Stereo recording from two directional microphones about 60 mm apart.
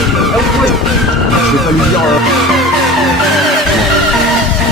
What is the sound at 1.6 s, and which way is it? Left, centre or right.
Music, centre.